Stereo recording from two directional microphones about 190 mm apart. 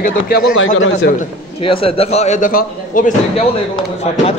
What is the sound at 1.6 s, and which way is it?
A man's voice, 30° left (ahead or behind).